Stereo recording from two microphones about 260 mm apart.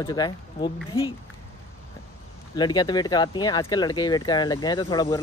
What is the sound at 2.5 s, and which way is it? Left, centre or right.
Speech, centre.